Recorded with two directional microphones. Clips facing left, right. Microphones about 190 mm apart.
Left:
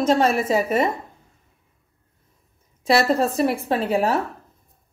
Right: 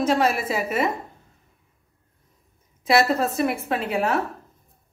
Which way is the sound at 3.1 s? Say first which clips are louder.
Left 3 dB; 30° left (ahead or behind).